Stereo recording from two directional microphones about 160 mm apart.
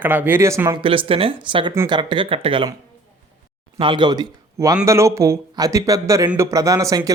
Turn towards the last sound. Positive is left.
turn(degrees=-20)  # may be behind; listen again after turning